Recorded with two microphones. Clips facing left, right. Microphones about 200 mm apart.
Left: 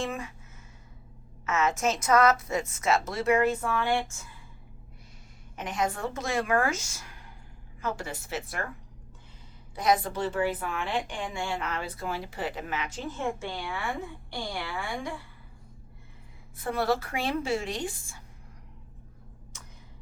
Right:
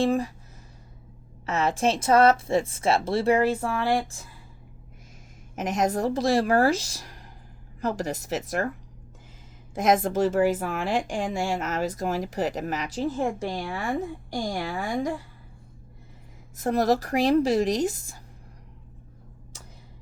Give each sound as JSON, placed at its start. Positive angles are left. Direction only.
{"t": 0.0, "sound": "speech", "side_deg": -35}
{"t": 1.5, "sound": "speech", "side_deg": -35}
{"t": 5.5, "sound": "speech", "side_deg": -40}
{"t": 9.7, "sound": "a woman's voice", "side_deg": -45}
{"t": 16.6, "sound": "speech", "side_deg": -40}